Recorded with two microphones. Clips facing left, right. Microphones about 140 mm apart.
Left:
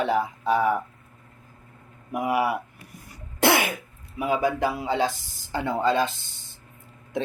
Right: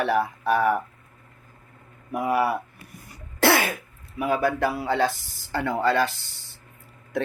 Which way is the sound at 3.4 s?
20° left (ahead or behind).